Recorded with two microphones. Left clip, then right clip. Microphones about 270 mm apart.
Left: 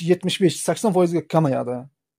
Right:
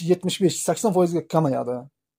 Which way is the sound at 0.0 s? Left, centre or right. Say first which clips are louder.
Left 2 dB; left.